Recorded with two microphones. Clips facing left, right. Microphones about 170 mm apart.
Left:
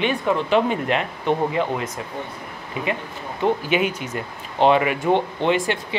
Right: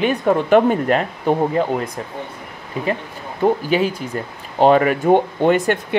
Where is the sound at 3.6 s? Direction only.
35° right (ahead or behind).